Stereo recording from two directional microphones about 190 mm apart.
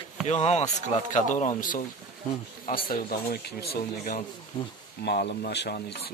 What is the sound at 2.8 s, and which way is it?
Speech, 50° left (ahead or behind).